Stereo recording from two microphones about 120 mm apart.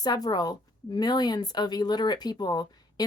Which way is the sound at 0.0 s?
35° left (ahead or behind).